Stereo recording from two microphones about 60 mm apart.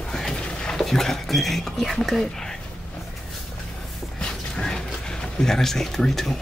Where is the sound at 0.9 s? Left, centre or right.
Centre.